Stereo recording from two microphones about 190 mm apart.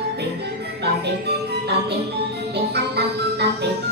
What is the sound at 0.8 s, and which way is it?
Speech, 60° right (ahead or behind).